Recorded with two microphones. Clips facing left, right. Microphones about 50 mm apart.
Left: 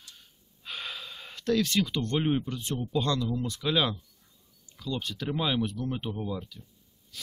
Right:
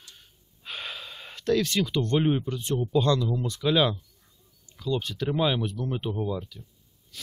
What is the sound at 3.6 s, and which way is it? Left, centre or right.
Speech, centre.